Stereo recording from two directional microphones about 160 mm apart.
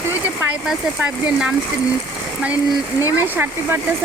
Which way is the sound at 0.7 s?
5° right (ahead or behind).